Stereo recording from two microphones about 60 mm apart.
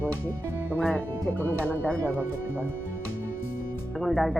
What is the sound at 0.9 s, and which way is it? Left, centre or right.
Speech, left.